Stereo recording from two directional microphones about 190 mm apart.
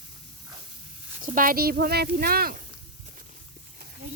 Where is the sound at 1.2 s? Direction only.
45° right (ahead or behind).